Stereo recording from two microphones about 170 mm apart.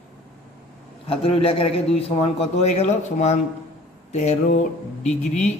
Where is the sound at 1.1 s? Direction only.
35° left (ahead or behind).